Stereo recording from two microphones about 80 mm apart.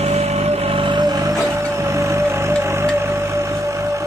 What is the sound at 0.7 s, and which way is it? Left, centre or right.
Vehicle, right.